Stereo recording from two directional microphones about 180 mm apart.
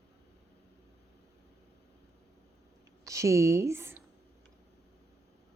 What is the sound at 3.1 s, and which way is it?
Speech, 15° right (ahead or behind).